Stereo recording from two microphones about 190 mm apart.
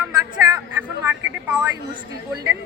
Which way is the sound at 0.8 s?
10° right (ahead or behind).